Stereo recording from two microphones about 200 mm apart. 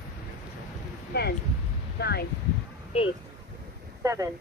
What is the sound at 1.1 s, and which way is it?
Speech, 55° left (ahead or behind).